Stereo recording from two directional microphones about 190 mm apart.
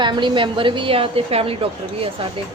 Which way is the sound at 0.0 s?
25° right (ahead or behind).